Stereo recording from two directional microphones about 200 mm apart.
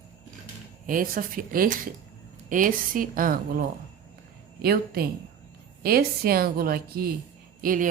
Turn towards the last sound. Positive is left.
turn(degrees=-40)  # may be behind; listen again after turning